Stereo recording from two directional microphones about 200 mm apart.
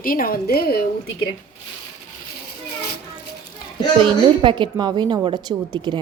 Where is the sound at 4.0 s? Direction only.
25° right (ahead or behind).